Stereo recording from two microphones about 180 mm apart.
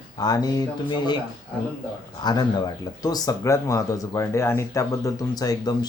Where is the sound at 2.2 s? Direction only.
20° left (ahead or behind).